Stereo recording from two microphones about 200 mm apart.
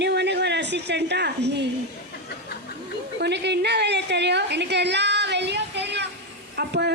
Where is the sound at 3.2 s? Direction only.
60° right (ahead or behind).